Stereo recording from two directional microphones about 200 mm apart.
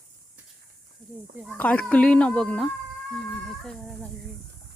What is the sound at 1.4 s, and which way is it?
Speech, 5° left (ahead or behind).